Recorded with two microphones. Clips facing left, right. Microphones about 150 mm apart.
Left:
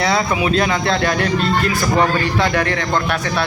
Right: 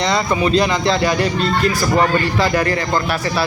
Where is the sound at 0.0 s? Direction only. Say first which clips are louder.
Even; 5° left (ahead or behind).